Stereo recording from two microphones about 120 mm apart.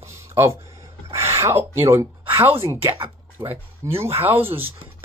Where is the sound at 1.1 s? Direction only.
25° right (ahead or behind).